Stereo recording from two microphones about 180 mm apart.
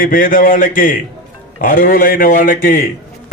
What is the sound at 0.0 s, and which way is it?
A man's voice, 50° left (ahead or behind).